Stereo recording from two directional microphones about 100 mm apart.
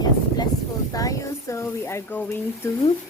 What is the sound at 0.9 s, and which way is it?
Speech, 35° left (ahead or behind).